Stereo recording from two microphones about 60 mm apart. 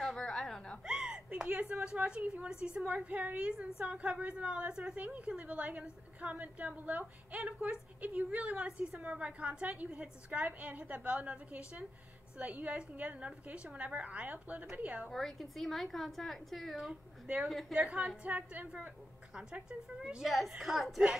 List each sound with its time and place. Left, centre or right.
0.0 s a sound: centre
0.8 s a sound: centre
1.7 s a woman's voice: right
2.0 s a woman's voice: centre
15.0 s a woman's voice: centre
17.7 s a woman's voice: centre
19.3 s a woman's voice: centre
20.2 s a woman's voice: centre